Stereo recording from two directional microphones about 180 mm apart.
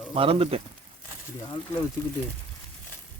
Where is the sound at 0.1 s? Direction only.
30° right (ahead or behind).